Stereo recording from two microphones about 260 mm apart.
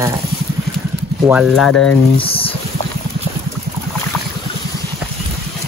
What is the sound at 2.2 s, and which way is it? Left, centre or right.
Boiling, left.